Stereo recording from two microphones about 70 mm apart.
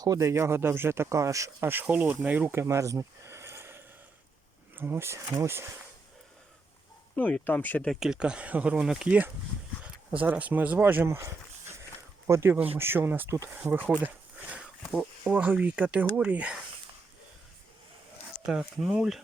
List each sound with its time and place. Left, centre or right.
0.2 s speech: right
1.6 s speech: right
2.6 s a sound: right
4.7 s speech: right
7.2 s speech: left
7.9 s speech: centre; by 13.9 s right
14.9 s speech: centre
18.4 s speech: centre